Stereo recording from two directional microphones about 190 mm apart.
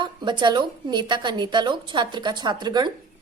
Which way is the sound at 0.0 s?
25° right (ahead or behind).